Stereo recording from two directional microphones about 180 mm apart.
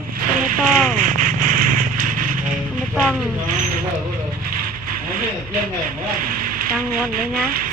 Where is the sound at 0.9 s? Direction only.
45° right (ahead or behind).